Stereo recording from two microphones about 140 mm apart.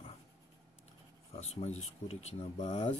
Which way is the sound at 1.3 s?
45° left (ahead or behind).